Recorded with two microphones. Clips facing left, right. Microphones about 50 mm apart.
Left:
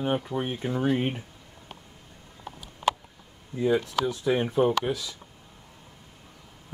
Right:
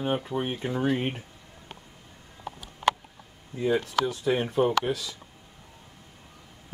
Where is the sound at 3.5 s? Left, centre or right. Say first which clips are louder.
Left 1 dB; centre.